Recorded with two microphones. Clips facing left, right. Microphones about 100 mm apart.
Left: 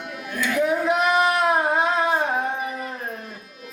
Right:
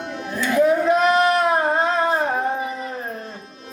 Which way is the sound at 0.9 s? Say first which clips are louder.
Right 3 dB; 15° left (ahead or behind).